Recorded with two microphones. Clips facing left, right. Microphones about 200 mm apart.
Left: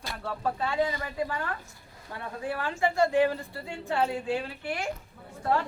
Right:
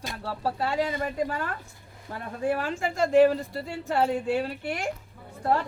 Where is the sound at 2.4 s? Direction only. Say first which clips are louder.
Right 3 dB; 45° right (ahead or behind).